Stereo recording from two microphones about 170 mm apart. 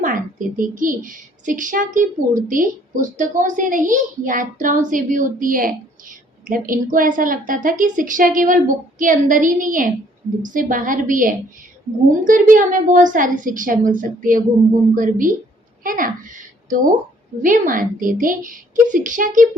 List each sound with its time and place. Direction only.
0.0 s a child's voice: 50° right (ahead or behind)